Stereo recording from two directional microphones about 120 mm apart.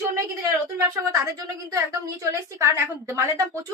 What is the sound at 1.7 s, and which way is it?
A woman's voice, 25° right (ahead or behind).